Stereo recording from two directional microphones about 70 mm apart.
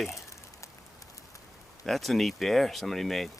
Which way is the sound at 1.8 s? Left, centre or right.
Centre.